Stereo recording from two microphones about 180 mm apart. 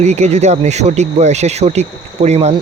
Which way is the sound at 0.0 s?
40° right (ahead or behind).